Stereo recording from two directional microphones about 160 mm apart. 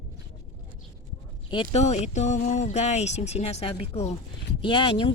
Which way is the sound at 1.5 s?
30° left (ahead or behind).